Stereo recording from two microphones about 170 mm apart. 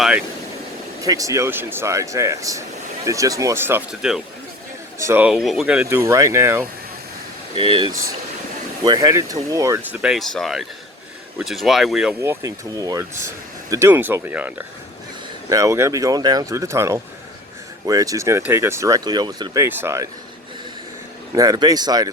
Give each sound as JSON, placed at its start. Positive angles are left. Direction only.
{"t": 1.0, "sound": "speech", "side_deg": -20}
{"t": 4.9, "sound": "speech", "side_deg": -15}
{"t": 5.3, "sound": "speech", "side_deg": 0}
{"t": 5.8, "sound": "speech", "side_deg": -15}
{"t": 7.5, "sound": "speech", "side_deg": -30}
{"t": 10.0, "sound": "speech", "side_deg": 0}
{"t": 12.2, "sound": "speech", "side_deg": -15}
{"t": 21.3, "sound": "speech", "side_deg": -20}